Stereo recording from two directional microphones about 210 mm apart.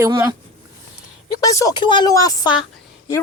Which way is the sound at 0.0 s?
15° right (ahead or behind).